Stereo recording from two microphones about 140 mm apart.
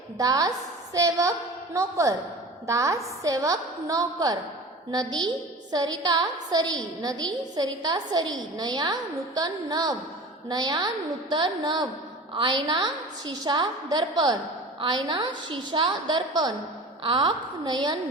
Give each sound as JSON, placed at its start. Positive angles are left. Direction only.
{"t": 0.2, "sound": "a woman's voice", "side_deg": -25}